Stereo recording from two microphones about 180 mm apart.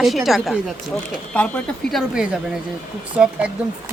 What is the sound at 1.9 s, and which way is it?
Speech, centre (ahead or behind).